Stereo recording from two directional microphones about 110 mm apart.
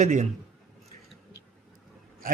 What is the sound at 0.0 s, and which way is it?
Speech, 80° right.